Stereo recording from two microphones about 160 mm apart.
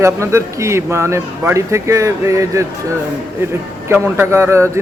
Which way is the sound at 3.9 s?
15° right (ahead or behind).